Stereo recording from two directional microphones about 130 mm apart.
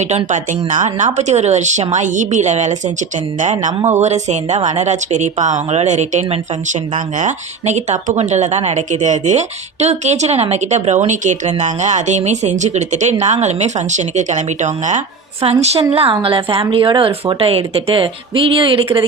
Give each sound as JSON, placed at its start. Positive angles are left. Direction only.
{"t": 0.3, "sound": "speech", "side_deg": -75}
{"t": 15.4, "sound": "speech", "side_deg": -50}